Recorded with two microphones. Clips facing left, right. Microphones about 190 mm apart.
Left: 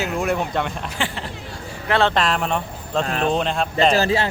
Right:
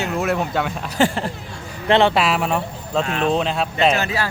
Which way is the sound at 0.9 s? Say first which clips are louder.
Right 13 dB; 45° right (ahead or behind).